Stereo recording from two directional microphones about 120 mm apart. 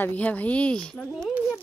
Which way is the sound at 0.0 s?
15° left (ahead or behind).